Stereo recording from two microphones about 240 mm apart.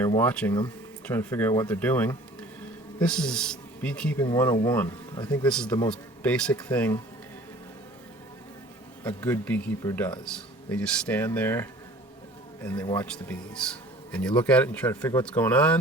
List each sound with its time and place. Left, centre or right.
0.2 s speech: centre
9.0 s speech: centre